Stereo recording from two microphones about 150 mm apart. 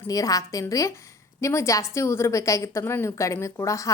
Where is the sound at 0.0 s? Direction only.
20° left (ahead or behind).